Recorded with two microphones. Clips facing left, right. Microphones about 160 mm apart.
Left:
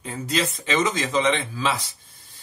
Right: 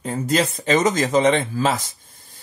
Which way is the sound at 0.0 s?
45° right (ahead or behind).